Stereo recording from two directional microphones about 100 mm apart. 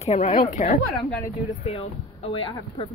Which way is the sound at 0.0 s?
90° left.